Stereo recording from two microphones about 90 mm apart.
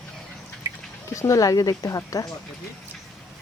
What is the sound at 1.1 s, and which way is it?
Speech, 35° left (ahead or behind).